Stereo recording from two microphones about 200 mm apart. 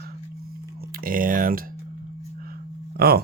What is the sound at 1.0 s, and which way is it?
Speech, 45° right (ahead or behind).